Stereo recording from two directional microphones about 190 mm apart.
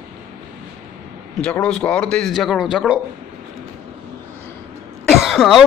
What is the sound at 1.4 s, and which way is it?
A man's voice, 5° left (ahead or behind).